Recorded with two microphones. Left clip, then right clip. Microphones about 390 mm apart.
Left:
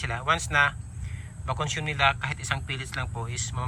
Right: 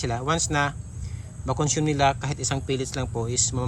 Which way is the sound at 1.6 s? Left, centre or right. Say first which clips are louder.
Right 2 dB; centre.